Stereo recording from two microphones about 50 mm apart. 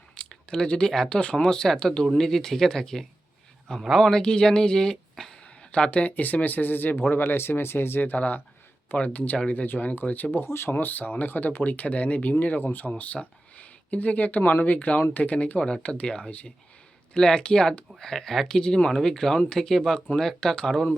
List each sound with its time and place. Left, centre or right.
0.1 s speech: centre
5.7 s speech: left
9.1 s speech: left
9.6 s speech: left; by 20.9 s centre